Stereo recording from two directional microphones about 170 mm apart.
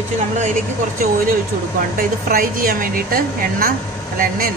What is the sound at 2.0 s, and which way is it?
A woman's voice, 60° right (ahead or behind).